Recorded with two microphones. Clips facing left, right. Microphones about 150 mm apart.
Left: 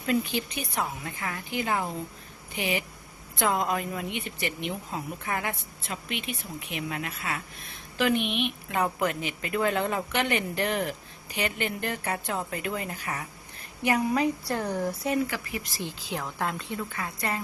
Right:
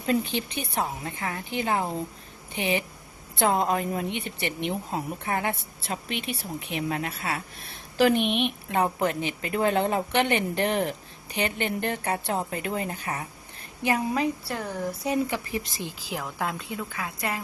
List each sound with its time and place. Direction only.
0.0 s a woman's voice: 30° right (ahead or behind)
8.7 s a woman's voice: 30° right (ahead or behind)
14.4 s speech: 15° left (ahead or behind)
15.3 s a woman's voice: 20° right (ahead or behind)
16.0 s speech: 5° right (ahead or behind)